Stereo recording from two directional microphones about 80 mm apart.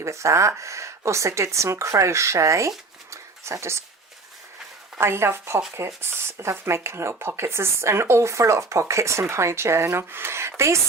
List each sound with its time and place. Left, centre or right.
0.0 s speech: right
4.9 s speech: right